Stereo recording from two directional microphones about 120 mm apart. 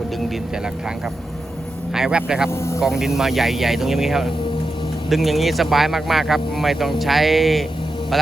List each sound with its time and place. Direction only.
1.9 s speech: 5° right (ahead or behind)
2.5 s speech: 25° left (ahead or behind)
2.8 s speech: 5° right (ahead or behind)